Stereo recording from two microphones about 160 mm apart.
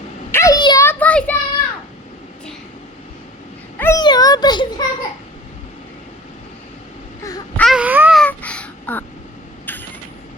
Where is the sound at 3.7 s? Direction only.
15° left (ahead or behind).